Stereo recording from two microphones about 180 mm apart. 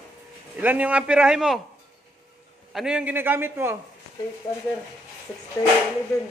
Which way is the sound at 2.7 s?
5° right (ahead or behind).